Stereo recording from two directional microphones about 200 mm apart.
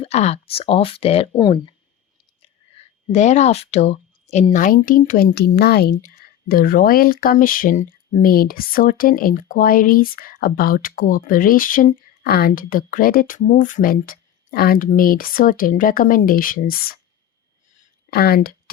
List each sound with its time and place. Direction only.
0.0 s speech: 35° left (ahead or behind)
2.4 s speech: 35° left (ahead or behind)
18.1 s speech: 50° left (ahead or behind)